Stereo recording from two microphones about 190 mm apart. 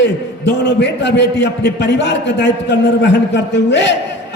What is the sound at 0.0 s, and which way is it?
A man's voice, 65° left (ahead or behind).